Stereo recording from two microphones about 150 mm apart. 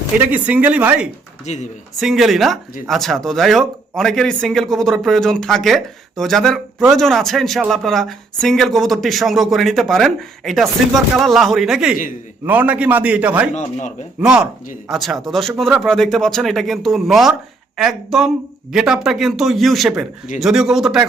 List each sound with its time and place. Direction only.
0.2 s a man's voice: 10° right (ahead or behind)
1.5 s speech: 55° left (ahead or behind)
2.0 s a man's voice: centre (ahead or behind)
13.5 s speech: 50° left (ahead or behind)
14.2 s a man's voice: 5° right (ahead or behind)